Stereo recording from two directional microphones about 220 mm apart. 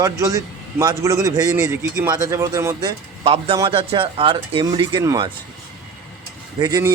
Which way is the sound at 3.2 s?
25° right (ahead or behind).